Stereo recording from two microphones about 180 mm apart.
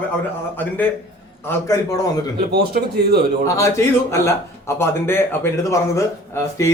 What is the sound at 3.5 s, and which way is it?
A man's voice, 15° left (ahead or behind).